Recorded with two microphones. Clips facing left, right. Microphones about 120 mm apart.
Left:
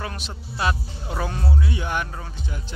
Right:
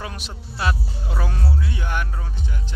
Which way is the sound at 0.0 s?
5° right (ahead or behind).